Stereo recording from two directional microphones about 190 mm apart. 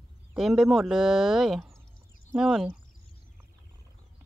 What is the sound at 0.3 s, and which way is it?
Speech, 5° right (ahead or behind).